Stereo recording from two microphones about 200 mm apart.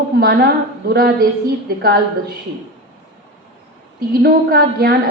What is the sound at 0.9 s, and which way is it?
Speech, 50° right (ahead or behind).